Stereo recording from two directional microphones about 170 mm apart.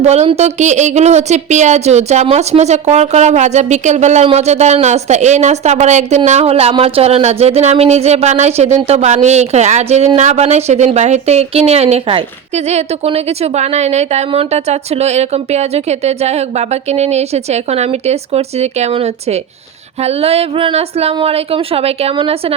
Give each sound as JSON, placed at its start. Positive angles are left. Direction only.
{"t": 0.0, "sound": "a woman's voice", "side_deg": -40}